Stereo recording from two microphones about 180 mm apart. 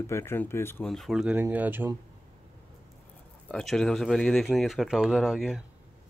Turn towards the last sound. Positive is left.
turn(degrees=-5)  # may be behind; listen again after turning